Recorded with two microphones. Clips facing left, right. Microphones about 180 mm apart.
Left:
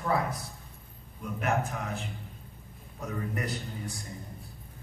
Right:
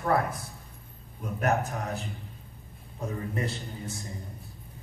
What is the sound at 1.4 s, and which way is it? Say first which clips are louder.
A man's voice: right 3 dB; 35° right (ahead or behind).